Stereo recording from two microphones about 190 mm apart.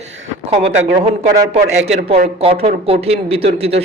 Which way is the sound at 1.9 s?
35° right (ahead or behind).